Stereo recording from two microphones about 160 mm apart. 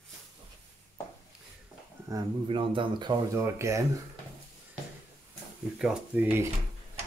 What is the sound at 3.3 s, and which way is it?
Speech, 15° right (ahead or behind).